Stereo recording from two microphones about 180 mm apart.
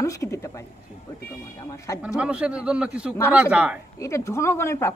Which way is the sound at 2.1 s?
5° right (ahead or behind).